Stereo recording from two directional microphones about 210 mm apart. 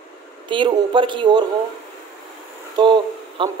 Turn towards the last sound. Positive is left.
turn(degrees=-20)  # may be behind; listen again after turning